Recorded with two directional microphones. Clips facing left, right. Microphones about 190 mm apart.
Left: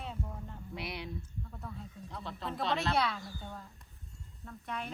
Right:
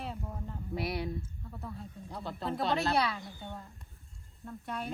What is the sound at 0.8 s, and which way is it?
Speech, 50° right (ahead or behind).